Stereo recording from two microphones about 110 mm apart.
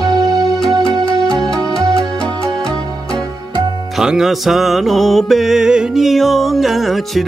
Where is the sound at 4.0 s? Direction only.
5° right (ahead or behind).